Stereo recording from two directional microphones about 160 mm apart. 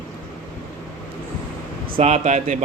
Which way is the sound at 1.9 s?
45° right (ahead or behind).